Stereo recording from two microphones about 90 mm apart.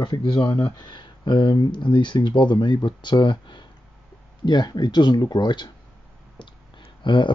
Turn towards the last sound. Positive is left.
turn(degrees=60)  # may be behind; listen again after turning